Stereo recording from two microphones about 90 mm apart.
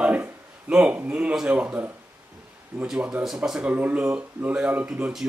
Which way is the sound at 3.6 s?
15° right (ahead or behind).